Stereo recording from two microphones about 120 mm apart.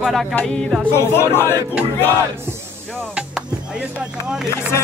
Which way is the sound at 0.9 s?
20° left (ahead or behind).